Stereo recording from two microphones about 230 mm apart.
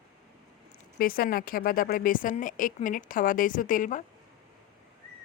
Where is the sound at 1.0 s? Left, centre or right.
Left.